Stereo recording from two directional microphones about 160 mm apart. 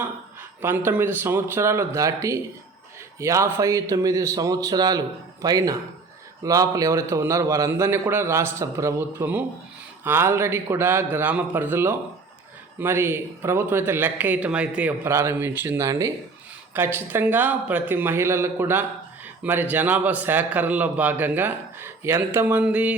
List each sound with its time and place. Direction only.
0.6 s a man's voice: 15° right (ahead or behind)